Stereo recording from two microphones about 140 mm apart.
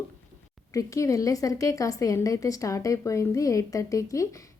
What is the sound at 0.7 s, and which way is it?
A woman's voice, 25° left (ahead or behind).